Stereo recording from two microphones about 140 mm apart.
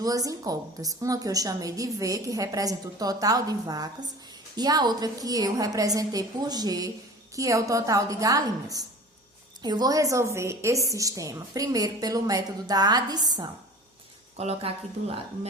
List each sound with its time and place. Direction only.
0.0 s a woman's voice: 25° right (ahead or behind)
14.3 s speech: 50° right (ahead or behind)